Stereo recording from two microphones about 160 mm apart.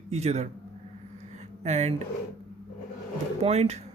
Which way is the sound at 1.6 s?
45° right (ahead or behind).